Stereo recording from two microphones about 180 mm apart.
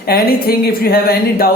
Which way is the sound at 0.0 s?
60° left (ahead or behind).